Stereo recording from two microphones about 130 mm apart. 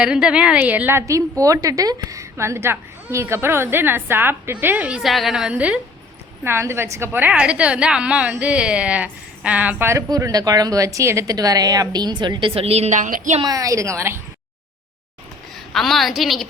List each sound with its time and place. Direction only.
0.0 s a woman's voice: 5° right (ahead or behind)
6.4 s a woman's voice: 20° right (ahead or behind)
10.1 s speech: 25° right (ahead or behind); by 13.4 s 75° right (ahead or behind)
13.4 s speech: 30° right (ahead or behind)
15.7 s a woman's voice: centre (ahead or behind)